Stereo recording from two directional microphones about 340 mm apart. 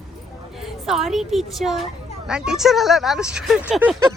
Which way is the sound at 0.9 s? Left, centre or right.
Centre.